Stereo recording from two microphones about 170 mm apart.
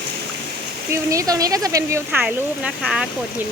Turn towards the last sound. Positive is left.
turn(degrees=-5)  # may be behind; listen again after turning